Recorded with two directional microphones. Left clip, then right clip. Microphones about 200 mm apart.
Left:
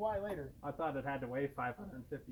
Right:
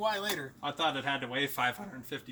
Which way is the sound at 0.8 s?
40° right (ahead or behind).